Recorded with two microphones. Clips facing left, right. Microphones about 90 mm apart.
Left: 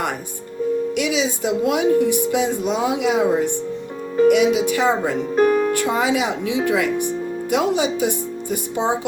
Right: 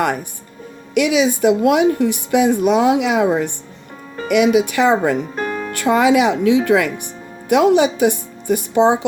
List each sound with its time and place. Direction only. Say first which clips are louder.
0.9 s a woman's voice: right 6 dB; 60° right (ahead or behind)
5.4 s speech: left 7 dB; 10° left (ahead or behind)
5.8 s a woman's voice: right 6 dB; 65° right (ahead or behind)